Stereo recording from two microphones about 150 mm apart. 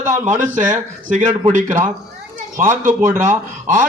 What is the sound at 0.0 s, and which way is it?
A man's voice, 55° right (ahead or behind).